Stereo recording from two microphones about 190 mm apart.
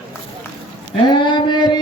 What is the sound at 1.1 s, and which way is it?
Speech, 25° left (ahead or behind).